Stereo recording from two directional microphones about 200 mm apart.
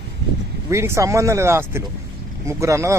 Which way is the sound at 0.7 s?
15° right (ahead or behind).